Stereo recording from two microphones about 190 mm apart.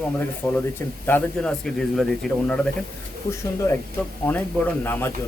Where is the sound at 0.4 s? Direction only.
15° left (ahead or behind).